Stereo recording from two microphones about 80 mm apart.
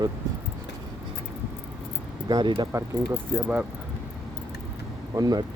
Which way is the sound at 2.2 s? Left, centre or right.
Right.